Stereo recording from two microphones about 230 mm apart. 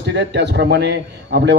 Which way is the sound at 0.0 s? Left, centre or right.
Right.